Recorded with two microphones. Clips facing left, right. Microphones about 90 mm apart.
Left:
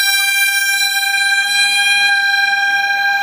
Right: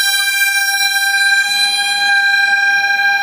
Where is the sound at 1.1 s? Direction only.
20° right (ahead or behind).